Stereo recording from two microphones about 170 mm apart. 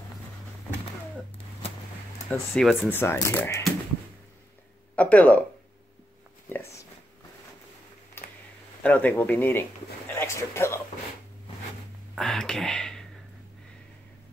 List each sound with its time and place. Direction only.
2.2 s speech: centre (ahead or behind)
2.9 s speech: 15° left (ahead or behind)
4.9 s speech: 10° left (ahead or behind)
6.5 s a sound: 15° left (ahead or behind)
8.2 s a sound: 15° left (ahead or behind)
8.8 s speech: 10° left (ahead or behind)
12.2 s speech: 5° left (ahead or behind)